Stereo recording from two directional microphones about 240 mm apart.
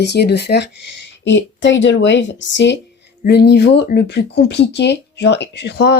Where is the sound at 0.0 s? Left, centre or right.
Left.